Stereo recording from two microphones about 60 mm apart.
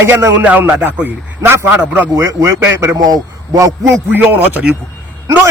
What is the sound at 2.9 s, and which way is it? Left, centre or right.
A man's voice, right.